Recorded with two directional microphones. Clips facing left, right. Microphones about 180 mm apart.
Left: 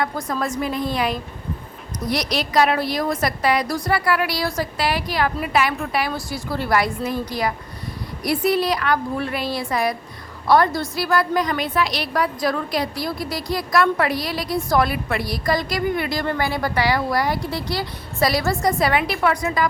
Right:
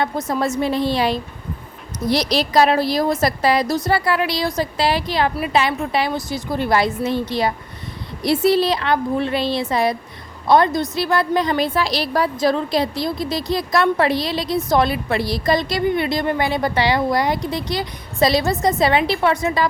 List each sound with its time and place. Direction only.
0.0 s a woman's voice: 25° right (ahead or behind)